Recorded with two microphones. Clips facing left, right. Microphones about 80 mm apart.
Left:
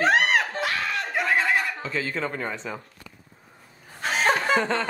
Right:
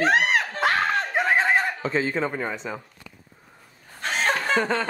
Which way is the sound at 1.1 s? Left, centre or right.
Right.